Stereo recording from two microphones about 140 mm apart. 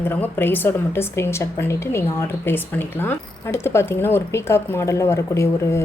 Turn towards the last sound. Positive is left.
turn(degrees=20)  # may be behind; listen again after turning